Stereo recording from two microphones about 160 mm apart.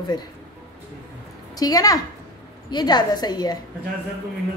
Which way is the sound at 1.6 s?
25° left (ahead or behind).